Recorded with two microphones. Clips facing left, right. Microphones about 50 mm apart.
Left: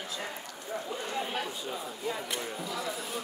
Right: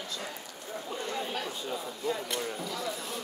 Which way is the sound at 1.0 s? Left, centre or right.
Centre.